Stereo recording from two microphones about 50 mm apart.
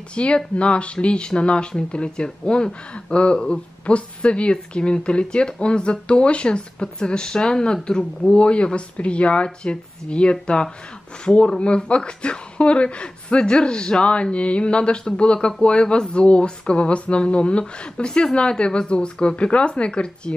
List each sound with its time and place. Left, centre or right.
0.1 s a woman's voice: left
8.4 s a woman's voice: left